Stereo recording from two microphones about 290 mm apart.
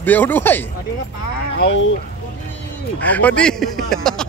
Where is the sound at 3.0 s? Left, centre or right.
Centre.